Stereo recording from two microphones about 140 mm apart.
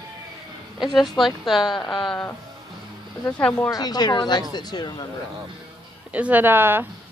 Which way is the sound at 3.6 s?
30° left (ahead or behind).